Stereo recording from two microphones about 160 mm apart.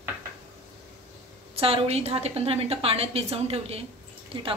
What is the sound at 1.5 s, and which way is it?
A woman's voice, 35° right (ahead or behind).